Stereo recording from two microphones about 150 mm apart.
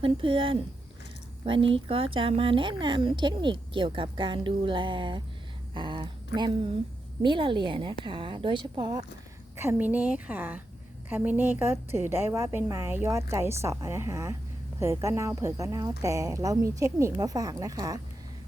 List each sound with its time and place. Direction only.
0.0 s speech: 35° right (ahead or behind)
9.6 s a woman's voice: 15° right (ahead or behind)